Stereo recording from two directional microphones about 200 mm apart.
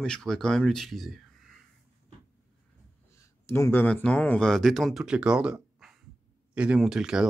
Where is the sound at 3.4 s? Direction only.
10° left (ahead or behind).